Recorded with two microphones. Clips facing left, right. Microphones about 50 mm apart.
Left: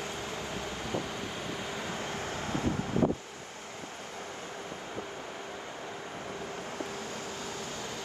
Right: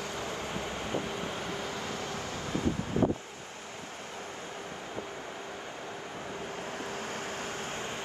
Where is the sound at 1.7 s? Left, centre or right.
Left.